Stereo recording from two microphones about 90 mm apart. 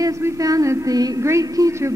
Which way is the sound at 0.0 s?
40° right (ahead or behind).